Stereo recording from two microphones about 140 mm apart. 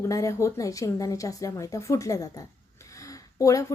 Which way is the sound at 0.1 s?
25° left (ahead or behind).